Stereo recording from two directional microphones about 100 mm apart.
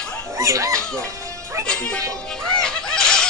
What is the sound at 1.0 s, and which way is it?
Music, 30° right (ahead or behind).